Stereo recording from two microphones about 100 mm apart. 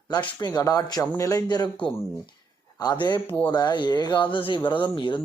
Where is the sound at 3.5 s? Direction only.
45° left (ahead or behind).